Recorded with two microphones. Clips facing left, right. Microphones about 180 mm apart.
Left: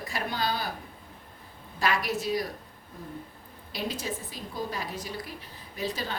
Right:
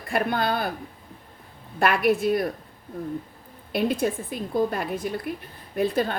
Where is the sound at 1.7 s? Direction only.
55° right (ahead or behind).